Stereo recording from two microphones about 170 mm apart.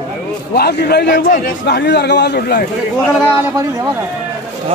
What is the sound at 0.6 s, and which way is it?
A man's voice, 70° left (ahead or behind).